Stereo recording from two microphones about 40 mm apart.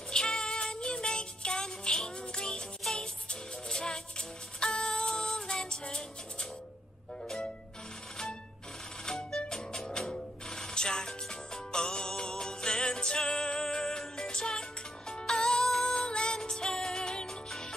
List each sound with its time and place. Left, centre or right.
0.1 s music: centre
7.2 s music: centre
9.0 s music: centre